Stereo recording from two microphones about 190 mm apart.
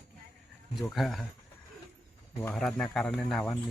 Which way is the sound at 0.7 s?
Centre (ahead or behind).